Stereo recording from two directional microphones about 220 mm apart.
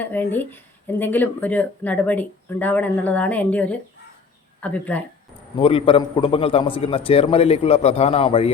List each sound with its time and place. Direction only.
0.0 s speech: 10° left (ahead or behind)
5.5 s a man's voice: 25° left (ahead or behind)